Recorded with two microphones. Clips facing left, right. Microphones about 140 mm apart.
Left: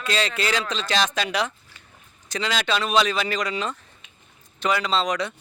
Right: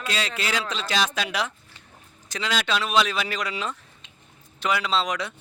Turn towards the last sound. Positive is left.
turn(degrees=-5)  # may be behind; listen again after turning